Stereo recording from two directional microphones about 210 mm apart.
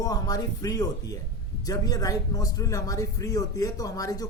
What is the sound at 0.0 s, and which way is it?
A man's voice, 15° left (ahead or behind).